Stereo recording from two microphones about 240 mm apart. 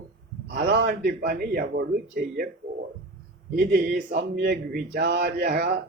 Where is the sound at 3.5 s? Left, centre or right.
Right.